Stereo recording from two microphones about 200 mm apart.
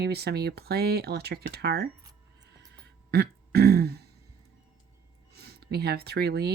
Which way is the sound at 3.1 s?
55° right (ahead or behind).